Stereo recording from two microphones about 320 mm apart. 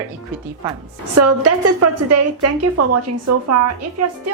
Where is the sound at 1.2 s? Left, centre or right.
Right.